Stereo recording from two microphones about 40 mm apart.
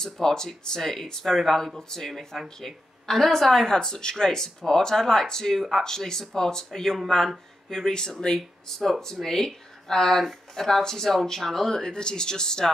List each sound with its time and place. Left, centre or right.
0.0 s speech: centre
3.7 s speech: centre
8.6 s speech: centre